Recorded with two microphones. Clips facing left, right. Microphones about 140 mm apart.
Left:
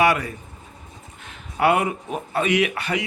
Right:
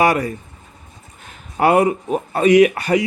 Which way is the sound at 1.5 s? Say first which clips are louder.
Right 5 dB; 40° right (ahead or behind).